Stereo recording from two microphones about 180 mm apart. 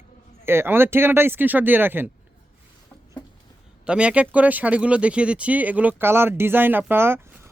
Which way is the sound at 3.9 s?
5° right (ahead or behind).